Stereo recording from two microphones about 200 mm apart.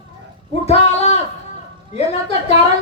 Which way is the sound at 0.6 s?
30° left (ahead or behind).